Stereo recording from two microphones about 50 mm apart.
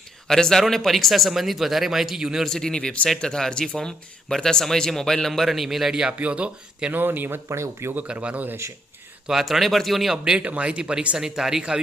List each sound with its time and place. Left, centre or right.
0.3 s speech: centre
2.5 s speech: centre
6.1 s speech: right
6.9 s speech: right
7.4 s speech: right
8.0 s speech: right
9.2 s speech: centre
10.4 s speech: right
11.2 s speech: centre